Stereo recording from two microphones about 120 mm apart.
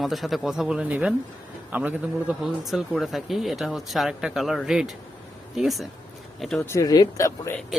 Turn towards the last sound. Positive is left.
turn(degrees=25)  # may be behind; listen again after turning